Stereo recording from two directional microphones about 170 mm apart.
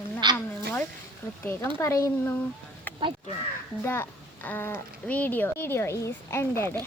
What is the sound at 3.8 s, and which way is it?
Speech, 15° left (ahead or behind).